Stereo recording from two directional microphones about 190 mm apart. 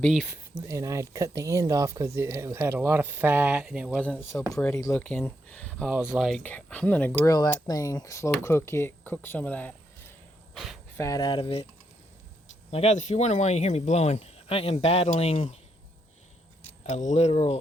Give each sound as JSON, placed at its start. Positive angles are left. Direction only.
{"t": 0.0, "sound": "speech", "side_deg": 0}
{"t": 0.6, "sound": "speech", "side_deg": -15}
{"t": 7.2, "sound": "speech", "side_deg": 20}
{"t": 10.9, "sound": "speech", "side_deg": 15}
{"t": 12.7, "sound": "speech", "side_deg": 35}
{"t": 16.6, "sound": "speech", "side_deg": 40}